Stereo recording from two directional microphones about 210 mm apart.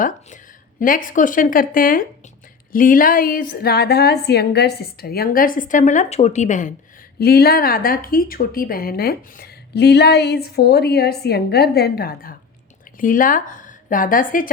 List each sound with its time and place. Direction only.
0.8 s a woman's voice: 40° left (ahead or behind)
7.2 s a woman's voice: 45° left (ahead or behind)